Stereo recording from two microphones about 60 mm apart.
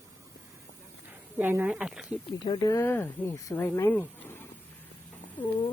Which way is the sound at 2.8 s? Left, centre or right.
Left.